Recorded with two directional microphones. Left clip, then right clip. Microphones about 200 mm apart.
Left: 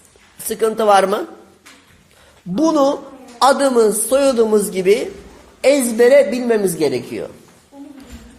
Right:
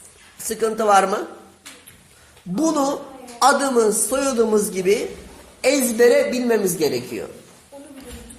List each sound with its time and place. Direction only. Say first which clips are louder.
0.4 s a man's voice: left 4 dB; 35° left (ahead or behind)
2.6 s a man's voice: left 6 dB; 35° left (ahead or behind)